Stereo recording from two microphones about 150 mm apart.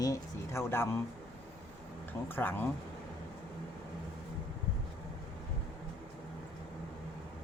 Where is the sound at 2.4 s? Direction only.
15° left (ahead or behind).